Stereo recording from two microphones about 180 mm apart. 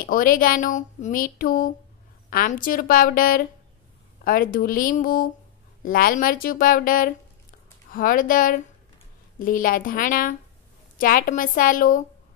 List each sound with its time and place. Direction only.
0.0 s speech: 50° left (ahead or behind)